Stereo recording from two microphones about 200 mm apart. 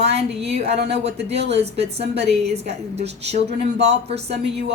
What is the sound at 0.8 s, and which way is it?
A woman's voice, 30° right (ahead or behind).